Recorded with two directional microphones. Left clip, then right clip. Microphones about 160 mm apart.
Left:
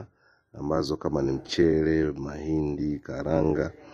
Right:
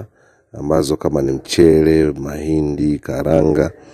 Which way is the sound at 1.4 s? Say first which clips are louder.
Right 13 dB; 45° right (ahead or behind).